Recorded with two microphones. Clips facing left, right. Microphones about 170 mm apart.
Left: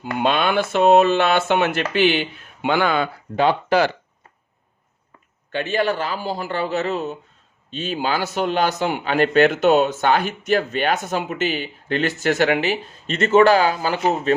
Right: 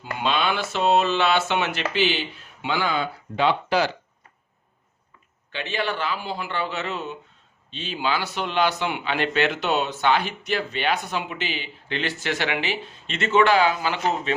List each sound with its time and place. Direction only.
0.0 s speech: 50° left (ahead or behind)
5.5 s a man's voice: 45° left (ahead or behind)